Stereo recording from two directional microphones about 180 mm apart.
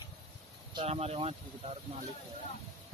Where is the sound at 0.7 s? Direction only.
30° right (ahead or behind).